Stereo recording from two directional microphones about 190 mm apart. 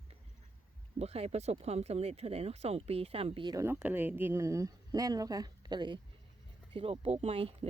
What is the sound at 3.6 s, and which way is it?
Speech, 10° right (ahead or behind).